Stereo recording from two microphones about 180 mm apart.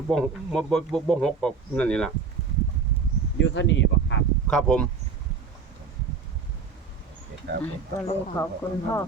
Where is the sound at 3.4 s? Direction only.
90° left.